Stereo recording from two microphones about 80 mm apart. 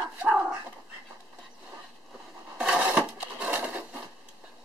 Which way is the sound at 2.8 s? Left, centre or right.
Centre.